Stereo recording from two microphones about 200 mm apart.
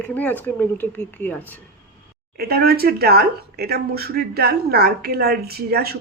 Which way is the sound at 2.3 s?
50° right (ahead or behind).